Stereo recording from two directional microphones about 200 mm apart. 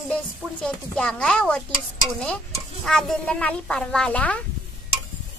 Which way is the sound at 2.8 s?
5° left (ahead or behind).